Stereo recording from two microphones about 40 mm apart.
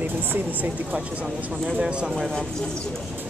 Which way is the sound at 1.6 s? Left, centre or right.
Right.